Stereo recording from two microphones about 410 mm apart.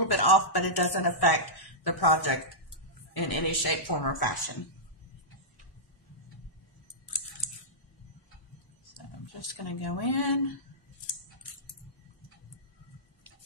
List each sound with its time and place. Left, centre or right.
0.0 s speech: left
8.9 s speech: left